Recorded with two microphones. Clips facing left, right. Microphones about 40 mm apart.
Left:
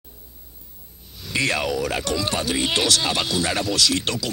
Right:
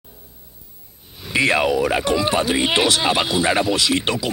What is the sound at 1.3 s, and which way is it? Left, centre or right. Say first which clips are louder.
Speech: right 5 dB; right.